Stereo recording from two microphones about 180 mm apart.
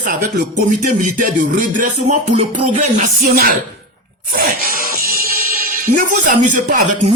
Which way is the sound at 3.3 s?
55° right (ahead or behind).